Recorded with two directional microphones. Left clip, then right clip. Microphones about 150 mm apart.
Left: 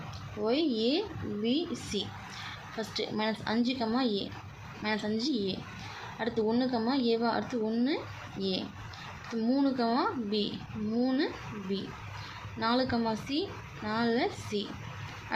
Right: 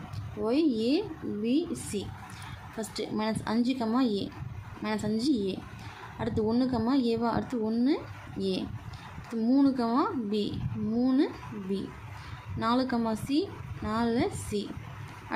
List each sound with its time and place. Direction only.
0.4 s speech: 25° right (ahead or behind)
12.5 s speech: 30° right (ahead or behind)